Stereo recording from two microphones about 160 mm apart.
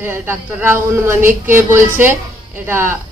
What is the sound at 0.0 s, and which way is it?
Speech, 15° right (ahead or behind).